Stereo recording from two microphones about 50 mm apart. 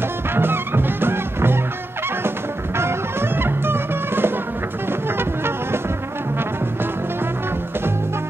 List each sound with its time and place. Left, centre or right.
0.3 s music: right
2.8 s music: right